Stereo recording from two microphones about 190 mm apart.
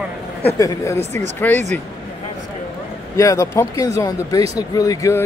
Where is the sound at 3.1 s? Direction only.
15° left (ahead or behind).